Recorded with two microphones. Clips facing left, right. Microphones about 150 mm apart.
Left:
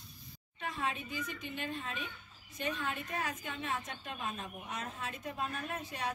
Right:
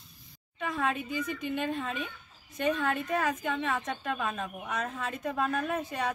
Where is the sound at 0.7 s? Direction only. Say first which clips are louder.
Right 7 dB; 65° right (ahead or behind).